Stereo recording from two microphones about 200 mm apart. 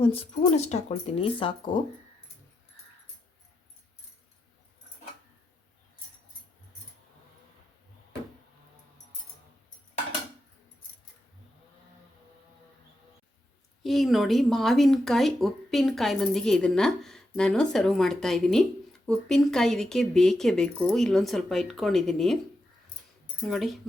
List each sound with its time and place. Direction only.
0.0 s speech: 30° left (ahead or behind)
13.8 s speech: centre (ahead or behind)
23.4 s speech: centre (ahead or behind)